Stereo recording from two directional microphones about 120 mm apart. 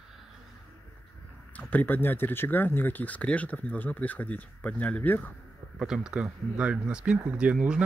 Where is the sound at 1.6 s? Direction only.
15° left (ahead or behind).